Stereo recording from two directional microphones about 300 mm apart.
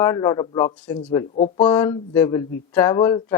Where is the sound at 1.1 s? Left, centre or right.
Centre.